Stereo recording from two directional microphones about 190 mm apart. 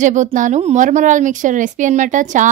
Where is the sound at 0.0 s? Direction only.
40° right (ahead or behind).